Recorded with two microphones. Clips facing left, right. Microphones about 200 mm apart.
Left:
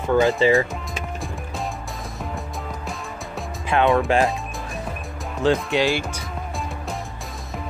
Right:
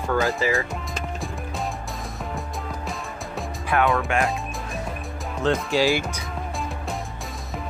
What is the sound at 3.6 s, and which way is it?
Speech, 20° left (ahead or behind).